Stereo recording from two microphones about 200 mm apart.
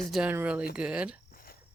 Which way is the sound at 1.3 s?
45° left (ahead or behind).